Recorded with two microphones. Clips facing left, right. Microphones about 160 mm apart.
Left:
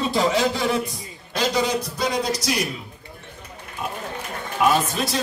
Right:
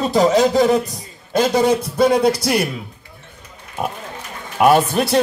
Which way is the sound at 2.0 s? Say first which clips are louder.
Right 11 dB; 55° right (ahead or behind).